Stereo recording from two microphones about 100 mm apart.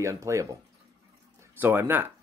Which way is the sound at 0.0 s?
30° right (ahead or behind).